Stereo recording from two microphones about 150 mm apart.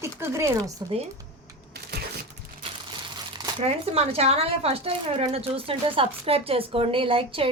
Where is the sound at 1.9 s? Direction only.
90° right.